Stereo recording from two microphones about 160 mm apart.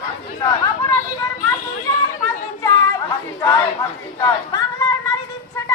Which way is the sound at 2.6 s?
20° left (ahead or behind).